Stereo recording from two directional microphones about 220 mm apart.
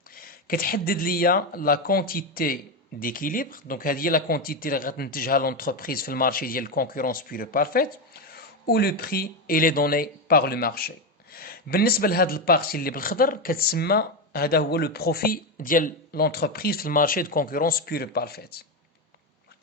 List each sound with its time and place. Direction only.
0.1 s speech: 40° left (ahead or behind)